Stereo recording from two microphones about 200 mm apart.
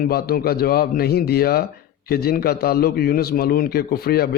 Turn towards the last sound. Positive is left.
turn(degrees=50)  # may be behind; listen again after turning